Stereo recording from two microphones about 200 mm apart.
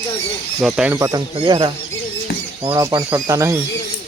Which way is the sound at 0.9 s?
20° right (ahead or behind).